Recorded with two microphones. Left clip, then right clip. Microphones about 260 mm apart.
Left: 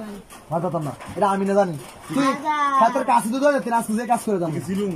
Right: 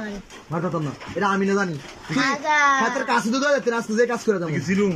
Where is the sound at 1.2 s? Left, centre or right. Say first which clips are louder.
Left 3 dB; left.